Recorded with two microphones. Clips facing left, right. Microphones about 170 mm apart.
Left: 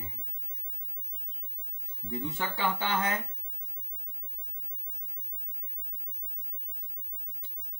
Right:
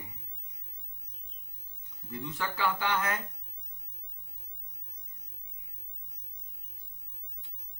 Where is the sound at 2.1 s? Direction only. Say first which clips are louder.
Left 3 dB; 25° left (ahead or behind).